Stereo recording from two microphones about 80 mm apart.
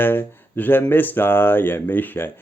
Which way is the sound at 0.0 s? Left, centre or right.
Left.